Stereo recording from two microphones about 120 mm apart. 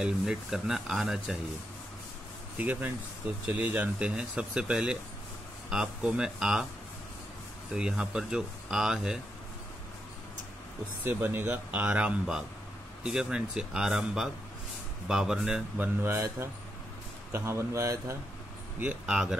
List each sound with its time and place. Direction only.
0.0 s speech: 5° right (ahead or behind)
2.5 s speech: 15° right (ahead or behind)
7.7 s speech: 5° right (ahead or behind)
11.1 s speech: 15° right (ahead or behind)
15.8 s a man's voice: 20° right (ahead or behind)
18.8 s speech: 10° right (ahead or behind)